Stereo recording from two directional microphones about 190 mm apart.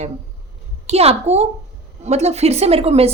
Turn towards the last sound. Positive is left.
turn(degrees=-30)  # may be behind; listen again after turning